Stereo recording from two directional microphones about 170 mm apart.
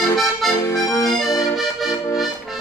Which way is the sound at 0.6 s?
20° left (ahead or behind).